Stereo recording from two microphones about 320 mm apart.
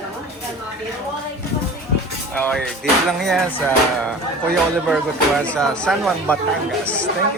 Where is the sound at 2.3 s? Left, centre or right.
Centre.